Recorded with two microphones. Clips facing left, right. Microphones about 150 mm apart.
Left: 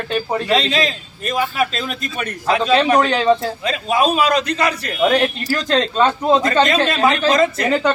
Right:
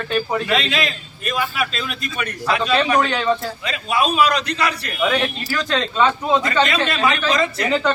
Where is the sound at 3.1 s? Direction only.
25° left (ahead or behind).